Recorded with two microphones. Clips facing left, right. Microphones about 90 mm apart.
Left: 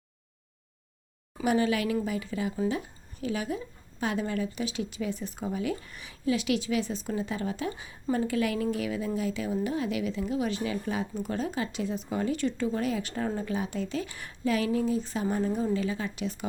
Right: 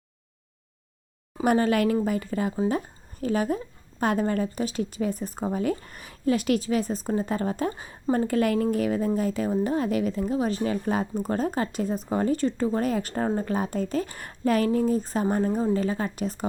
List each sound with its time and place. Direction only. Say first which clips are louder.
1.5 s a woman's voice: right 4 dB; 45° right (ahead or behind)